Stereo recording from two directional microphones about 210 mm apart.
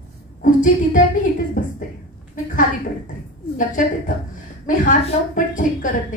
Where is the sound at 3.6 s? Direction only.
40° left (ahead or behind).